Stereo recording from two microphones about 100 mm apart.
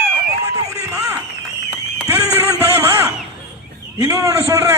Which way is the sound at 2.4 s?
25° right (ahead or behind).